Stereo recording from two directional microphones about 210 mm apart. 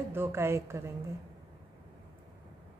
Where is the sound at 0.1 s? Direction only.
10° right (ahead or behind).